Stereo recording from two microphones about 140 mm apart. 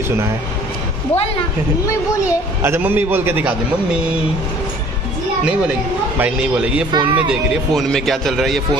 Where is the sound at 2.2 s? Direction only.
15° right (ahead or behind).